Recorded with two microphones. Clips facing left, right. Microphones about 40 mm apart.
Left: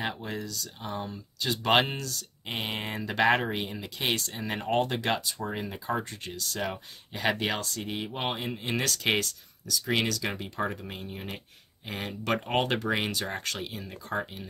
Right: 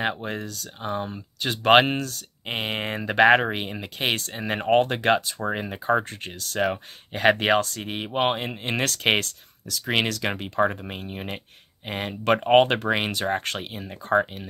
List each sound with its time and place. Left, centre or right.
0.0 s speech: right